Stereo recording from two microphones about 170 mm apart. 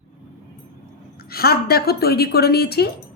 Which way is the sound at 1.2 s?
65° left (ahead or behind).